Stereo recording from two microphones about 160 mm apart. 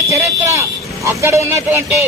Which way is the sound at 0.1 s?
20° right (ahead or behind).